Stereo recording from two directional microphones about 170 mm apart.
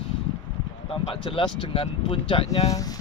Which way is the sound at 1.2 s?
30° left (ahead or behind).